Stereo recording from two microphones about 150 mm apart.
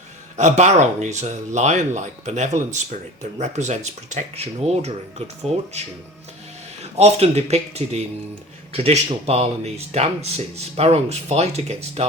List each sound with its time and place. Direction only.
0.3 s speech: 50° right (ahead or behind)
6.9 s speech: 45° right (ahead or behind)